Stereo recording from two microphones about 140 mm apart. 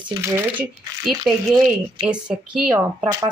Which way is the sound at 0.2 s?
15° right (ahead or behind).